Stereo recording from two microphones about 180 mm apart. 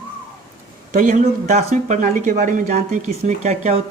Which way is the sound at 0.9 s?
45° right (ahead or behind).